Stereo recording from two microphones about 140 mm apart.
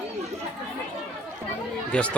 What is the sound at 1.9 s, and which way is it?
Speech, 10° left (ahead or behind).